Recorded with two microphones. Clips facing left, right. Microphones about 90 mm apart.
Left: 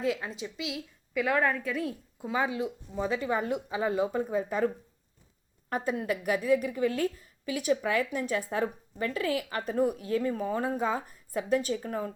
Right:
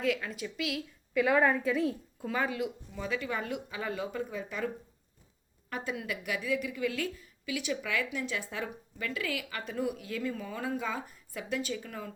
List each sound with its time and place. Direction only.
0.0 s speech: 30° left (ahead or behind)
1.1 s a woman's voice: centre (ahead or behind)
1.7 s a woman's voice: centre (ahead or behind)
2.2 s speech: 15° left (ahead or behind)
2.6 s a woman's voice: 30° left (ahead or behind)